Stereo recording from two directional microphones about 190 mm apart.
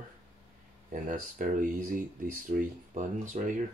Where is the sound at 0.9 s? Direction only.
45° right (ahead or behind).